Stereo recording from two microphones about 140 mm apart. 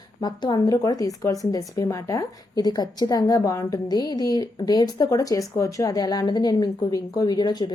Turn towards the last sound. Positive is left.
turn(degrees=30)  # may be behind; listen again after turning